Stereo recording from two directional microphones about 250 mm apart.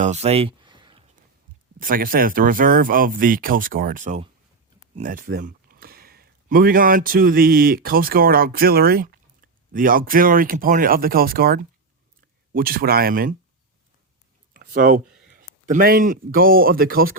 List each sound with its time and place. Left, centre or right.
0.0 s a sound: right
1.8 s a man's voice: right
14.5 s speech: right